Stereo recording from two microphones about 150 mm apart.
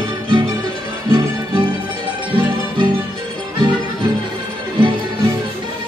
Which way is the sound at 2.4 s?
30° right (ahead or behind).